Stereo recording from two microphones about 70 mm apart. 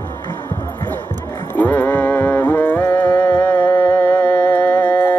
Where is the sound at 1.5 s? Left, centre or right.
Left.